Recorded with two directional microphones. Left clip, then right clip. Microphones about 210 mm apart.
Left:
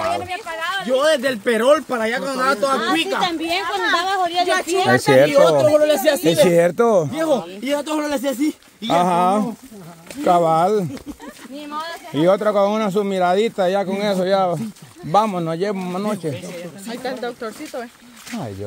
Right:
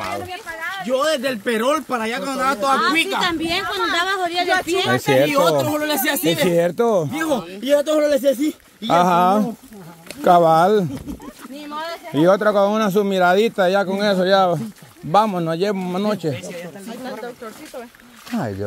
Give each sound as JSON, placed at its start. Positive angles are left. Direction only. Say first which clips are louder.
{"t": 0.6, "sound": "a sound", "louder": "left 4 dB", "side_deg": 65}
{"t": 0.8, "sound": "speech", "louder": "left 2 dB", "side_deg": -10}
{"t": 3.2, "sound": "a woman's voice", "louder": "even", "side_deg": -45}
{"t": 5.0, "sound": "speech", "louder": "left 4 dB", "side_deg": 5}
{"t": 5.3, "sound": "speech", "louder": "left 4 dB", "side_deg": -40}
{"t": 6.5, "sound": "speech", "louder": "left 2 dB", "side_deg": 5}
{"t": 8.8, "sound": "speech", "louder": "right 1 dB", "side_deg": -15}
{"t": 12.1, "sound": "speech", "louder": "right 1 dB", "side_deg": -15}
{"t": 17.0, "sound": "speech", "louder": "left 5 dB", "side_deg": 45}